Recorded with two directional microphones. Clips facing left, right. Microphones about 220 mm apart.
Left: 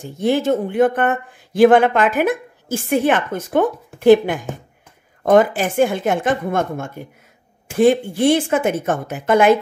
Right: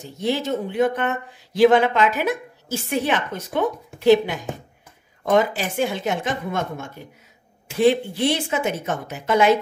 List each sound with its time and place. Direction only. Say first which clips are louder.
0.0 s speech: left 6 dB; 50° left (ahead or behind)